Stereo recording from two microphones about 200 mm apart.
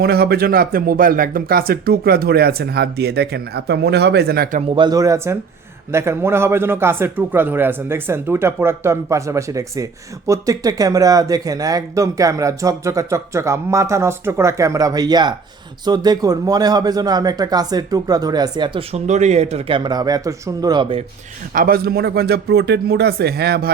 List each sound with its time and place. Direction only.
0.0 s speech: 50° right (ahead or behind)
4.7 s speech: 20° right (ahead or behind)
21.5 s speech: 45° right (ahead or behind)